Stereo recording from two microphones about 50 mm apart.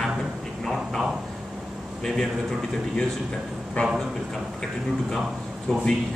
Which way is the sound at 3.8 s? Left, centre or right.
Left.